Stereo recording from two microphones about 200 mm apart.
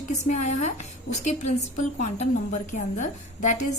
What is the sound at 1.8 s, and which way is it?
A woman's voice, 35° left (ahead or behind).